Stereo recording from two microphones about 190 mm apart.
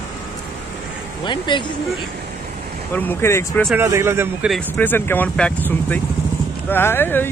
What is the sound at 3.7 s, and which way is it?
Speech, 15° right (ahead or behind).